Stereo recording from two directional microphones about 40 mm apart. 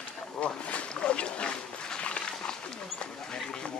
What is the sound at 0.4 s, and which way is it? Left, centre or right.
Boat, left.